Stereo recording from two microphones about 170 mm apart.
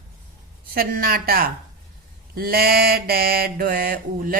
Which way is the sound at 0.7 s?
60° right (ahead or behind).